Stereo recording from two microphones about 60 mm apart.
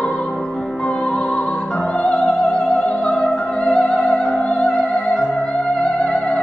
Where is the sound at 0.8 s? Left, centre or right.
Centre.